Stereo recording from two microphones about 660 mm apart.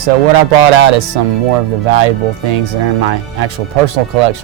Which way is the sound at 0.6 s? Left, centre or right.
Right.